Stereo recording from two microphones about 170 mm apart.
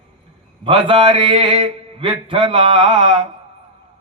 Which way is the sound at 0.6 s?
30° right (ahead or behind).